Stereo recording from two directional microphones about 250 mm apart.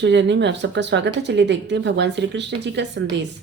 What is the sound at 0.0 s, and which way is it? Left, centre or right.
Speech, right.